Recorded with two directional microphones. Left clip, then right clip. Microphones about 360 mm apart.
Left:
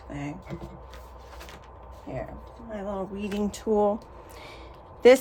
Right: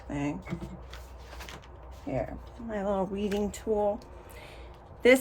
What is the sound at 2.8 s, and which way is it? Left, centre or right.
Speech, centre.